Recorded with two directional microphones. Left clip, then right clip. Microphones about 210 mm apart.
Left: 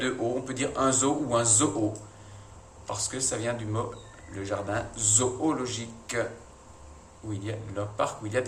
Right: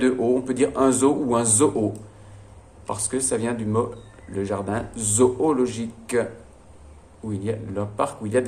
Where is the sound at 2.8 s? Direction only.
40° right (ahead or behind).